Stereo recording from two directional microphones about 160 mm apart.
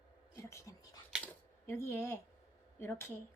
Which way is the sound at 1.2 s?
15° left (ahead or behind).